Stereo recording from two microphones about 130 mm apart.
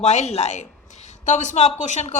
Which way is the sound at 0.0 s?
60° left (ahead or behind).